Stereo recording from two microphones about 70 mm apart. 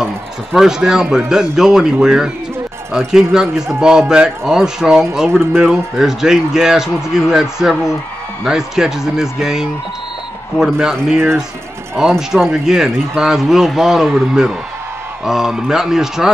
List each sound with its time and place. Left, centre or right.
0.0 s a man's voice: centre
5.3 s speech: right
5.6 s a man's voice: centre
12.2 s a man's voice: centre